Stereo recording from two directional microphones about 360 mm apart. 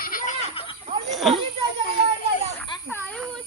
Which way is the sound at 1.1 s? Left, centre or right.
Centre.